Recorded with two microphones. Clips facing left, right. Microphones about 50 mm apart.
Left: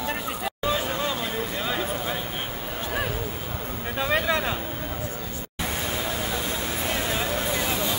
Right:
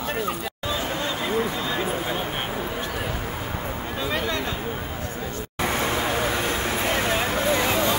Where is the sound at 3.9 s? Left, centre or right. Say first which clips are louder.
Left 3 dB; centre.